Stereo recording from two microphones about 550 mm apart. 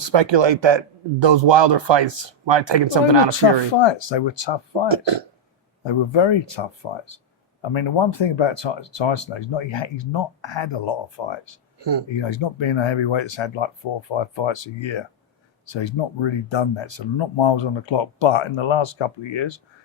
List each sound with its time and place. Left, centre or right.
0.1 s speech: right
3.8 s speech: left
4.9 s speech: right
5.8 s speech: left
11.8 s speech: right
12.1 s speech: left